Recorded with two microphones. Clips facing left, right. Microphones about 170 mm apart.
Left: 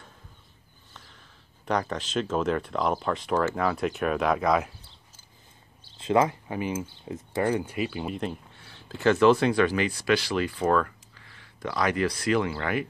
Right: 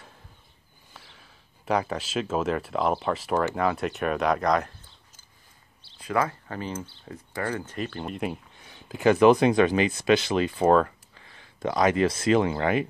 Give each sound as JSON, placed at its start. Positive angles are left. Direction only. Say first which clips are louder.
{"t": 0.9, "sound": "speech", "louder": "right 1 dB", "side_deg": -5}
{"t": 5.9, "sound": "speech", "louder": "left 4 dB", "side_deg": 25}
{"t": 8.2, "sound": "speech", "louder": "right 2 dB", "side_deg": -15}